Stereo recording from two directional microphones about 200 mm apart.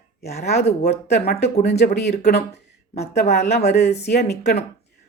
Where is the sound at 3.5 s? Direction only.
55° left (ahead or behind).